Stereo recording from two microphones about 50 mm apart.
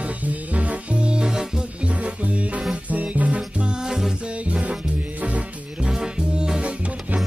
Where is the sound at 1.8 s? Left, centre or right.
Right.